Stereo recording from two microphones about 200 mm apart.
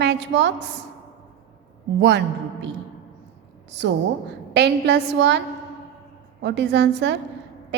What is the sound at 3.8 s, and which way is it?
Speech, 65° right (ahead or behind).